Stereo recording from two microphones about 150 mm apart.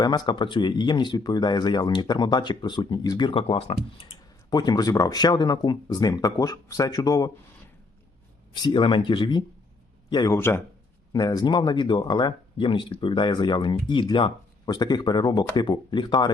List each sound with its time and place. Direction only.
0.0 s speech: 30° left (ahead or behind)
4.1 s speech: 25° left (ahead or behind)
8.5 s a man's voice: 30° left (ahead or behind)
10.3 s a man's voice: 15° left (ahead or behind); by 16.3 s 30° left (ahead or behind)